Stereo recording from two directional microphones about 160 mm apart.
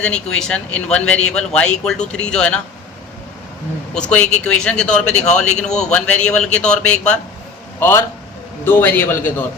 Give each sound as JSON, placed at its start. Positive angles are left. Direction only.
{"t": 0.0, "sound": "a man's voice", "side_deg": 5}
{"t": 3.9, "sound": "a man's voice", "side_deg": 5}
{"t": 5.5, "sound": "a man's voice", "side_deg": 45}
{"t": 5.9, "sound": "a man's voice", "side_deg": 10}